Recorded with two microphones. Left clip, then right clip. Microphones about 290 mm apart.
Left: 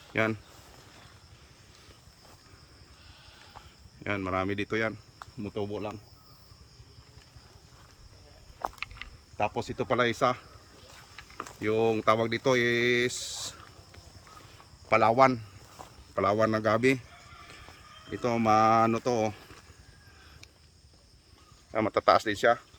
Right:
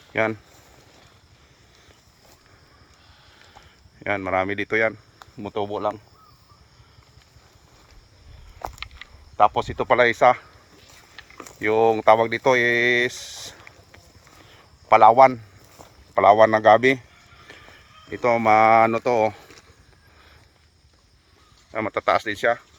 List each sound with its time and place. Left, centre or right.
0.1 s speech: centre
4.0 s speech: centre
5.2 s insect: right
8.6 s rowboat: right
9.4 s speech: centre
10.8 s vehicle: right
11.6 s speech: centre
14.4 s a sound: centre
16.1 s speech: centre
18.1 s speech: centre
21.7 s speech: centre